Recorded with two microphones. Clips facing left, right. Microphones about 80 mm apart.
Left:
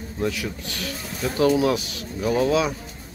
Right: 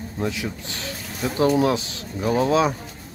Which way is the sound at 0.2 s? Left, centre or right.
Right.